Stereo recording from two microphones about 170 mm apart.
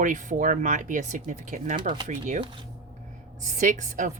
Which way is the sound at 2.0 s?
45° right (ahead or behind).